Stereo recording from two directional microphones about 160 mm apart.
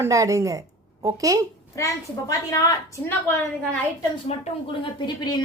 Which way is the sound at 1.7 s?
20° left (ahead or behind).